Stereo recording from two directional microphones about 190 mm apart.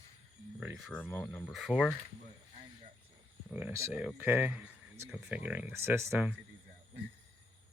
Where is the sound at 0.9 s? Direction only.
10° left (ahead or behind).